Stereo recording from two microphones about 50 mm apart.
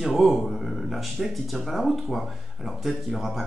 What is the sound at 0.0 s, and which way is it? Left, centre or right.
Speech, centre.